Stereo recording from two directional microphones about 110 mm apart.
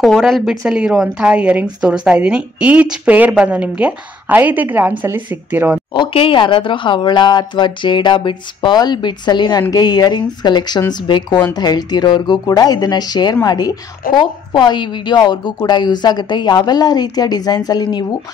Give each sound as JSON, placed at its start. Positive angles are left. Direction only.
{"t": 0.0, "sound": "a woman's voice", "side_deg": 5}
{"t": 5.9, "sound": "speech", "side_deg": 55}